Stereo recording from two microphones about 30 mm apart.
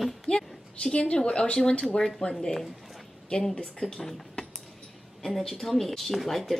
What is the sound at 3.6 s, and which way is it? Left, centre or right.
Speech, left.